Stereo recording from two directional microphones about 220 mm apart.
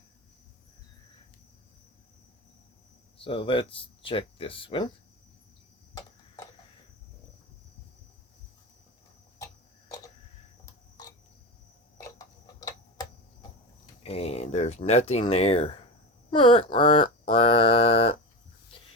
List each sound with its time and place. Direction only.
3.2 s speech: 25° left (ahead or behind)
5.9 s a sound: 15° left (ahead or behind)
12.0 s tick-tock: 15° left (ahead or behind)
14.0 s speech: 25° left (ahead or behind)
17.3 s mantra: 25° left (ahead or behind)